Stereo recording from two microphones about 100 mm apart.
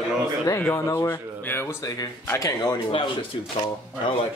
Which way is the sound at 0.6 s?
25° left (ahead or behind).